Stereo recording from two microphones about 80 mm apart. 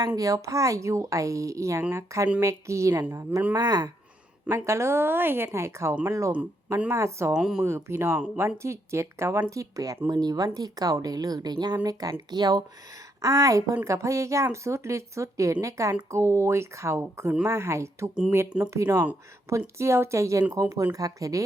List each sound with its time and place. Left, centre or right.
0.2 s a woman's voice: right
3.5 s a woman's voice: right
4.4 s speech: right
7.3 s speech: centre
7.6 s speech: right
9.6 s a woman's voice: right
12.3 s speech: right
13.2 s a woman's voice: right